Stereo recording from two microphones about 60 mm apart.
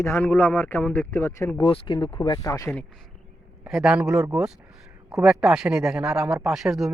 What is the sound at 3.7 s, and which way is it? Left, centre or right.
Speech, centre.